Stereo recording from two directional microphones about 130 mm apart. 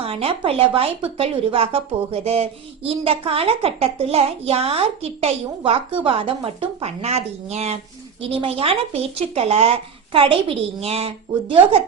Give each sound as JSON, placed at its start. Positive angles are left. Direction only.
{"t": 0.0, "sound": "speech", "side_deg": -45}